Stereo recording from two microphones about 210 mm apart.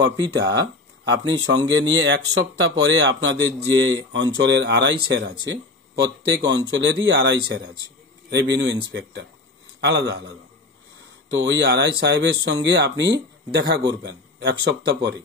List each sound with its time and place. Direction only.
0.0 s a man's voice: 55° right (ahead or behind)
9.8 s a man's voice: 55° right (ahead or behind)